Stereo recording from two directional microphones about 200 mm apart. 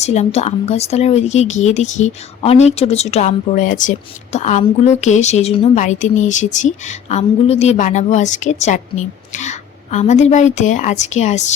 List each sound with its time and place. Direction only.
0.0 s a woman's voice: 35° left (ahead or behind)